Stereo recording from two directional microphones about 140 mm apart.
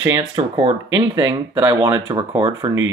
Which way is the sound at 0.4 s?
40° right (ahead or behind).